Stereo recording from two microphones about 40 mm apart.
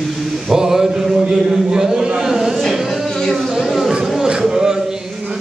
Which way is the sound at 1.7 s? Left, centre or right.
Centre.